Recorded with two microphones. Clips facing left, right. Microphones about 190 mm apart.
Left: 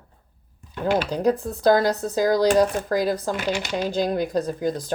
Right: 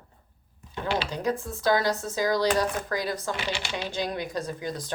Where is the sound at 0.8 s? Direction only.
45° left (ahead or behind).